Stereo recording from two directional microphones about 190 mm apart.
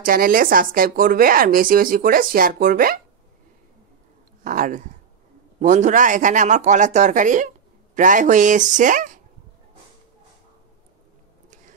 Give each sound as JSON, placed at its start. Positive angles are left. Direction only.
{"t": 0.0, "sound": "speech", "side_deg": -50}
{"t": 4.5, "sound": "speech", "side_deg": -45}